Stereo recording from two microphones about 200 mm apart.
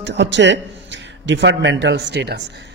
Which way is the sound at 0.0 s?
60° right (ahead or behind).